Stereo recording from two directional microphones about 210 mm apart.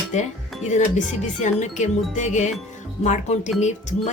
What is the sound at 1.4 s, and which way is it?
Speech, 35° left (ahead or behind).